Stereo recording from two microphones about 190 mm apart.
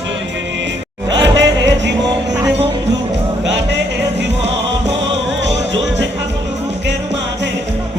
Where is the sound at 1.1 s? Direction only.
70° right (ahead or behind).